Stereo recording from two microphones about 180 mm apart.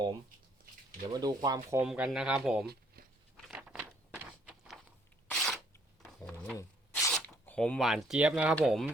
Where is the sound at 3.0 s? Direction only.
55° right (ahead or behind).